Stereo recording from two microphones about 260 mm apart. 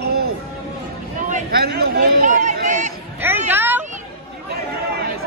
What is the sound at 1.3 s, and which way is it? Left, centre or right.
Speech, right.